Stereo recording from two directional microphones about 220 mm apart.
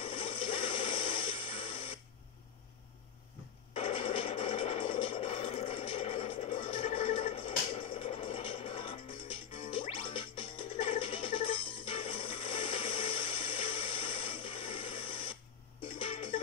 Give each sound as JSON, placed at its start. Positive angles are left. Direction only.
{"t": 0.0, "sound": "music", "side_deg": 25}
{"t": 3.7, "sound": "a sound", "side_deg": 25}
{"t": 16.0, "sound": "music", "side_deg": 25}